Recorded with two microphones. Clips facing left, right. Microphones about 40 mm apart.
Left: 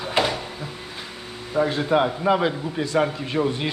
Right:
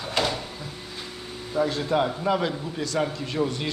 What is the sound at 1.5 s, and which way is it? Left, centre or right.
A man's voice, left.